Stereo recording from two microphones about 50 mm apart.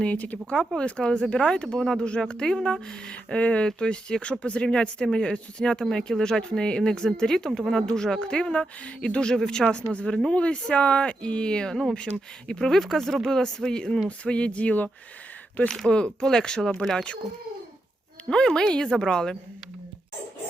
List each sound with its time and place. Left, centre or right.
0.0 s speech: left
9.2 s speech: centre; by 14.8 s left
15.9 s speech: centre
16.2 s speech: centre
18.3 s speech: centre